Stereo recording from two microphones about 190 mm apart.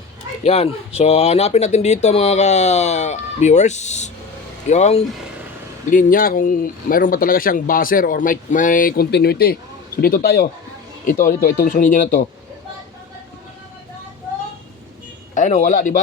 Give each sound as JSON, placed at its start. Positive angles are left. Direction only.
{"t": 0.4, "sound": "speech", "side_deg": 35}
{"t": 5.9, "sound": "speech", "side_deg": 45}
{"t": 15.4, "sound": "speech", "side_deg": 40}